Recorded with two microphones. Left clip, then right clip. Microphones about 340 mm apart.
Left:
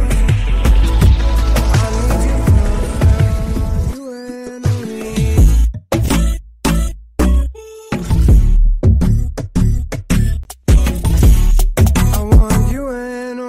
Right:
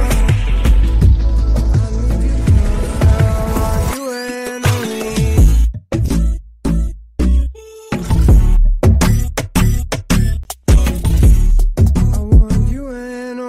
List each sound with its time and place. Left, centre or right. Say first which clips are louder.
0.0 s music: right 2 dB; centre
5.9 s music: left 4 dB; centre
6.6 s music: left 4 dB; left
7.9 s music: right 1 dB; centre
8.8 s music: right 4 dB; right
9.8 s music: right 3 dB; centre
11.5 s music: left 4 dB; left; by 13.5 s centre